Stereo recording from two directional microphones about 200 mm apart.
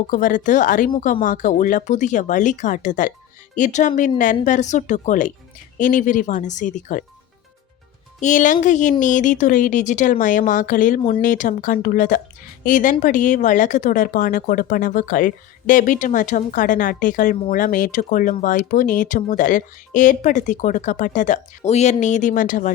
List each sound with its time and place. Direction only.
0.1 s speech: 40° left (ahead or behind)
8.2 s speech: 40° left (ahead or behind)